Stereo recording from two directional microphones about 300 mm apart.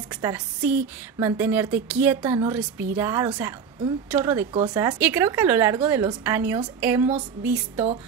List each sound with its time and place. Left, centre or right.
0.1 s a woman's voice: centre